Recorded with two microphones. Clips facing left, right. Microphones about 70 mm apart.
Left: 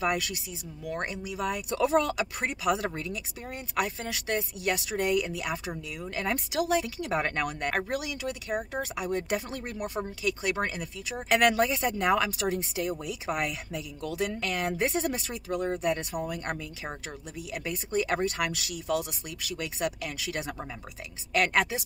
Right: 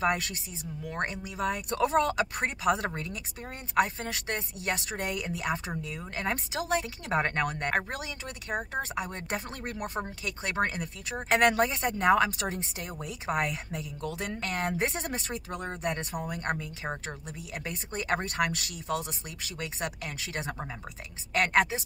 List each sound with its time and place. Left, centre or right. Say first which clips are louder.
0.0 s speech: even; right
10.2 s speech: left 2 dB; right